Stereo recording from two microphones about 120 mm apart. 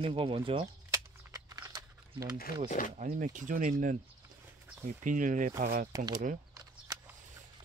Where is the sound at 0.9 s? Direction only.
30° right (ahead or behind).